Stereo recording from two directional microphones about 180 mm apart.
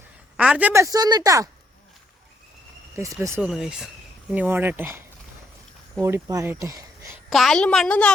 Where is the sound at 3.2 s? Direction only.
15° right (ahead or behind).